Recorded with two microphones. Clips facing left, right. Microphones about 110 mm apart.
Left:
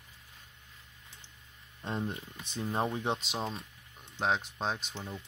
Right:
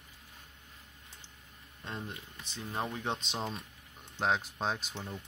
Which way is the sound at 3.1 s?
5° left (ahead or behind).